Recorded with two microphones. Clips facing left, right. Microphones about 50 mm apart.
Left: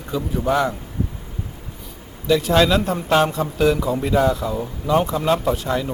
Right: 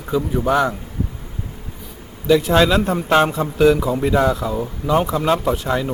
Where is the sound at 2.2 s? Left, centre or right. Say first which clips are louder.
Right 2 dB; centre.